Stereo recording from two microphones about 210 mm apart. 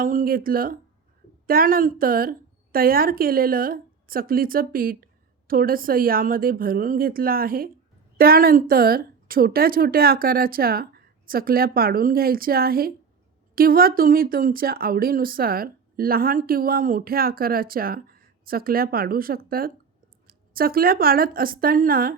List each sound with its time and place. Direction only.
0.0 s speech: 40° right (ahead or behind)